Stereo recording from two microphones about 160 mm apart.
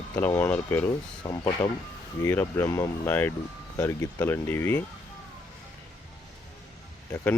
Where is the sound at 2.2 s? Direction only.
15° left (ahead or behind).